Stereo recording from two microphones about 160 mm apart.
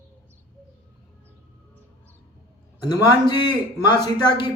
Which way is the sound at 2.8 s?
25° left (ahead or behind).